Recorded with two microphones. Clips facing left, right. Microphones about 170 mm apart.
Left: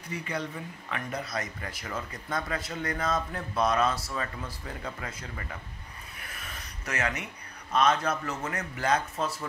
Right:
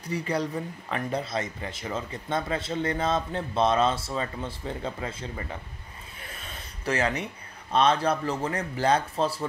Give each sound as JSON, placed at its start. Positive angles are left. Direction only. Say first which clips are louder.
{"t": 0.1, "sound": "speech", "louder": "right 6 dB", "side_deg": -35}
{"t": 6.2, "sound": "a sound", "louder": "right 3 dB", "side_deg": -25}
{"t": 7.7, "sound": "a man's voice", "louder": "right 3 dB", "side_deg": -30}